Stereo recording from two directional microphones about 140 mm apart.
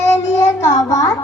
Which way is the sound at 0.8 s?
25° left (ahead or behind).